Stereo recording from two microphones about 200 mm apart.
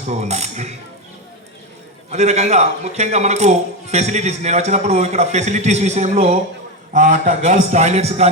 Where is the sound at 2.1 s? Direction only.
35° right (ahead or behind).